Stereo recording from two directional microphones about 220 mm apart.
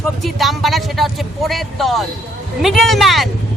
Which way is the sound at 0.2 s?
Centre (ahead or behind).